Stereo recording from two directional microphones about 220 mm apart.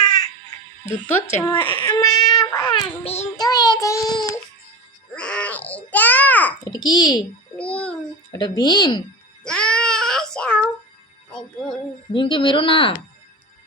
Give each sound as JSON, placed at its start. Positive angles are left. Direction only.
{"t": 0.0, "sound": "baby cry", "side_deg": 20}
{"t": 0.9, "sound": "speech", "side_deg": 10}
{"t": 1.5, "sound": "speech", "side_deg": 20}
{"t": 1.9, "sound": "a sound", "side_deg": 15}
{"t": 2.3, "sound": "child singing", "side_deg": 15}
{"t": 3.4, "sound": "child singing", "side_deg": 15}
{"t": 5.1, "sound": "babbling", "side_deg": 5}
{"t": 6.7, "sound": "speech", "side_deg": 20}
{"t": 7.6, "sound": "a sound", "side_deg": 5}
{"t": 8.4, "sound": "speech", "side_deg": 20}
{"t": 9.4, "sound": "child singing", "side_deg": 5}
{"t": 11.3, "sound": "speech", "side_deg": 5}
{"t": 12.1, "sound": "speech", "side_deg": 20}